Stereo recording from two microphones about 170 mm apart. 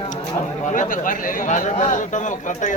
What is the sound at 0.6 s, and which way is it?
A man's voice, 50° left (ahead or behind).